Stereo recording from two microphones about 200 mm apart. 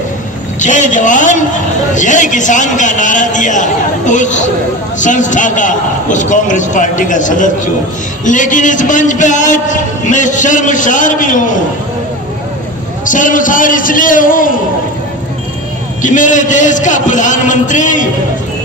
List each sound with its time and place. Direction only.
0.6 s a man's voice: 40° left (ahead or behind)
13.1 s a man's voice: 40° left (ahead or behind)
16.0 s a man's voice: 40° left (ahead or behind)